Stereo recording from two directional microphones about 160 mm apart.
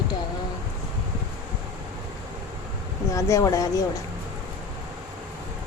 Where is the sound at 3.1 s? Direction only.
20° left (ahead or behind).